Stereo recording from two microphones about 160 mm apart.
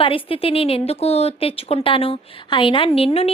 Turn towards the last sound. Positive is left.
turn(degrees=35)  # may be behind; listen again after turning